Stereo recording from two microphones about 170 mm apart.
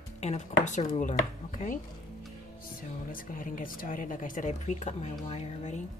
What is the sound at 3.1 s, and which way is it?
A woman's voice, 55° left (ahead or behind).